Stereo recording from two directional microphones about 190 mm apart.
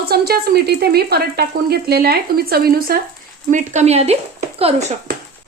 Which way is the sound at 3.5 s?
35° right (ahead or behind).